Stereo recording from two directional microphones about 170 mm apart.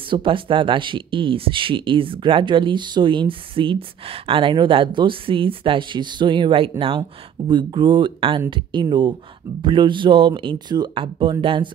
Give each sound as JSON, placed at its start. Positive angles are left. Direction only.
{"t": 0.1, "sound": "speech", "side_deg": -30}